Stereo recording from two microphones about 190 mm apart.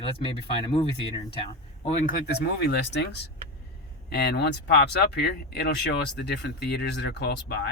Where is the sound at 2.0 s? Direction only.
55° left (ahead or behind).